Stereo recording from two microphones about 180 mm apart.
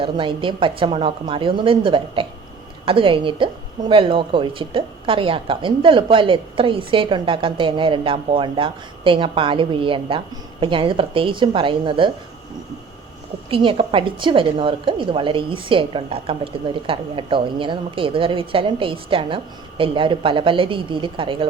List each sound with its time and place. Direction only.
0.0 s a woman's voice: 30° right (ahead or behind)
13.5 s a woman's voice: 30° right (ahead or behind)